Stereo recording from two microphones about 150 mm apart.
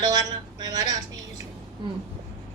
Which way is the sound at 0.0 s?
25° right (ahead or behind).